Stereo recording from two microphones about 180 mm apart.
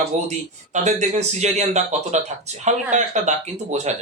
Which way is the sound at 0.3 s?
40° right (ahead or behind).